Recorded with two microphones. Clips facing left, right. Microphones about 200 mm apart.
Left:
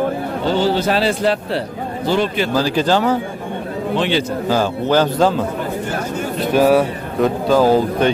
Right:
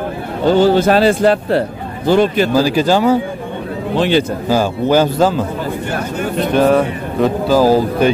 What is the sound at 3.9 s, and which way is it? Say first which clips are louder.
Speech: right 5 dB; 45° right (ahead or behind).